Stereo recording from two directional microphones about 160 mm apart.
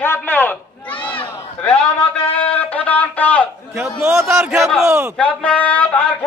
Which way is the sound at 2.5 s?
10° left (ahead or behind).